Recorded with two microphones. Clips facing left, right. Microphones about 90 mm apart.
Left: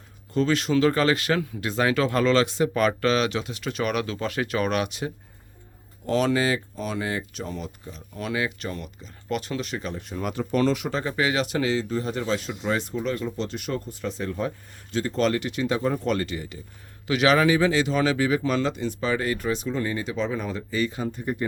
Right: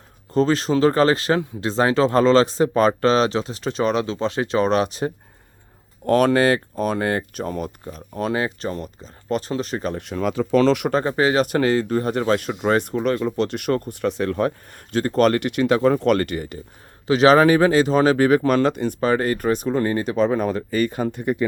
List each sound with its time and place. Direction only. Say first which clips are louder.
0.3 s speech: right 4 dB; 35° right (ahead or behind)
6.1 s speech: right 6 dB; 55° right (ahead or behind); by 9.9 s 40° right (ahead or behind)
9.9 s speech: right 7 dB; 85° right
10.9 s speech: right 6 dB; 40° right (ahead or behind); by 16.6 s 55° right (ahead or behind)
17.1 s speech: right 6 dB; 35° right (ahead or behind); by 21.4 s 75° right (ahead or behind)